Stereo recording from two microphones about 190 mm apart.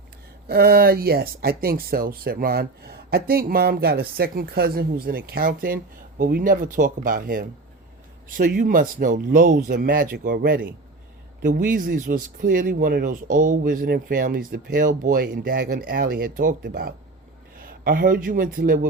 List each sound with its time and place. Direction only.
0.4 s speech: 55° right (ahead or behind)